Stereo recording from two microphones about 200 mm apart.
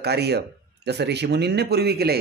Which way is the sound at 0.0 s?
55° right (ahead or behind).